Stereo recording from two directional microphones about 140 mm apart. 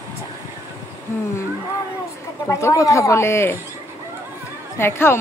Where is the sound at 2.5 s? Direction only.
25° left (ahead or behind).